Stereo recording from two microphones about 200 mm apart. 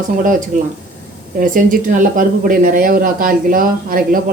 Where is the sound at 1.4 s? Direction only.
45° right (ahead or behind).